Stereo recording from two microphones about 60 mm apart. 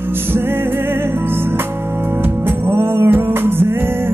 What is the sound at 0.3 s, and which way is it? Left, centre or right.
Music, right.